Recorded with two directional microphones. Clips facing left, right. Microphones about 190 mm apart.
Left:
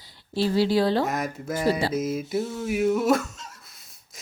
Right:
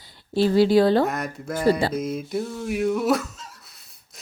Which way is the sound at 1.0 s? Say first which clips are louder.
Right 1 dB; centre (ahead or behind).